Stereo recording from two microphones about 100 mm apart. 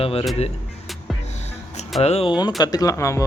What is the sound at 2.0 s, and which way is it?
Speech, 90° left.